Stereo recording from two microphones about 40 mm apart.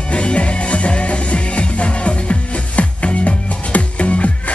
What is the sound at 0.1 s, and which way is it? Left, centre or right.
Music, left.